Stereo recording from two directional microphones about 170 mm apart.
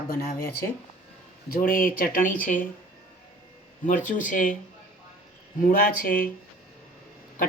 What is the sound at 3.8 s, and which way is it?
Speech, 50° left (ahead or behind).